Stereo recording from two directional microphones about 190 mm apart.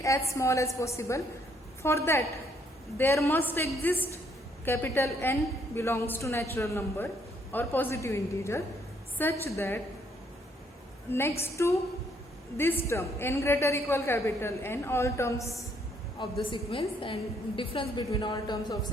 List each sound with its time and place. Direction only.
0.0 s a woman's voice: 15° left (ahead or behind)
11.1 s a woman's voice: 10° left (ahead or behind)
12.9 s a woman's voice: 15° left (ahead or behind)
16.1 s a woman's voice: 25° left (ahead or behind)